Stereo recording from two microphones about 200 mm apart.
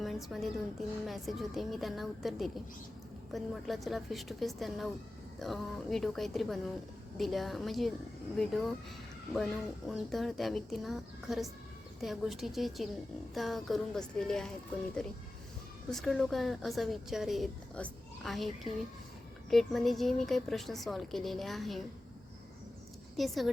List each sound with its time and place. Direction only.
0.0 s speech: centre (ahead or behind)
9.3 s speech: centre (ahead or behind)
23.1 s speech: centre (ahead or behind)